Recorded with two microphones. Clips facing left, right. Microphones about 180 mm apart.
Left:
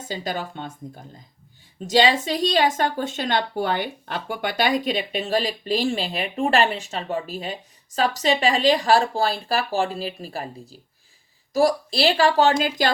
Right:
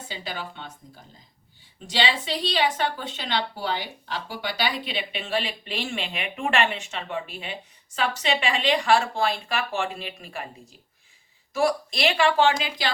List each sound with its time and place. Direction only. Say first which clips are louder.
0.1 s speech: left 7 dB; 45° left (ahead or behind)